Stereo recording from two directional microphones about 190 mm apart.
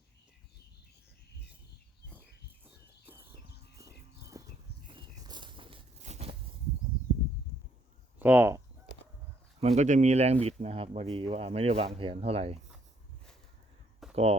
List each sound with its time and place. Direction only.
3.1 s horse: 10° right (ahead or behind)
3.8 s livestock: 15° right (ahead or behind)
4.9 s a sound: 25° right (ahead or behind)
8.2 s speech: 10° right (ahead or behind)
9.6 s speech: 35° right (ahead or behind)
14.0 s a sound: centre (ahead or behind)